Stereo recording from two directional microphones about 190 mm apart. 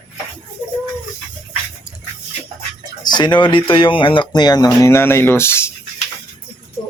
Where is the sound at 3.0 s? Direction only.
25° left (ahead or behind).